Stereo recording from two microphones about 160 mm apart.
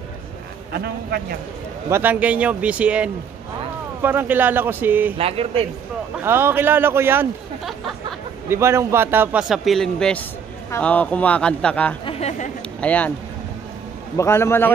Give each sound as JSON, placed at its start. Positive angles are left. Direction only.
{"t": 0.7, "sound": "a man's voice", "side_deg": -75}
{"t": 1.9, "sound": "a man's voice", "side_deg": -15}
{"t": 5.1, "sound": "speech", "side_deg": -40}
{"t": 6.1, "sound": "a man's voice", "side_deg": -15}
{"t": 8.5, "sound": "a man's voice", "side_deg": -15}
{"t": 12.1, "sound": "speech", "side_deg": 45}
{"t": 12.8, "sound": "a man's voice", "side_deg": 10}
{"t": 14.1, "sound": "a man's voice", "side_deg": 15}